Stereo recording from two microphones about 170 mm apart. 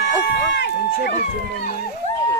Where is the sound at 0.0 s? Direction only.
85° left.